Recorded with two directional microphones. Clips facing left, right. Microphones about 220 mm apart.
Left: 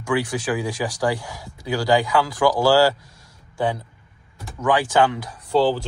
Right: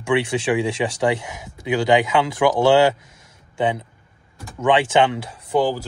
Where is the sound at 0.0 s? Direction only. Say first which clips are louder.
Right 3 dB; 25° right (ahead or behind).